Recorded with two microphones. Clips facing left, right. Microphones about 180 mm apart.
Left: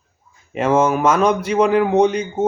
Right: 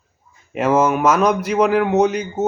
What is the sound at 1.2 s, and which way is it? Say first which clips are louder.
Speech: even; 30° left (ahead or behind).